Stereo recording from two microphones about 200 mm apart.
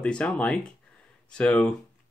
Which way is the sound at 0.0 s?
5° left (ahead or behind).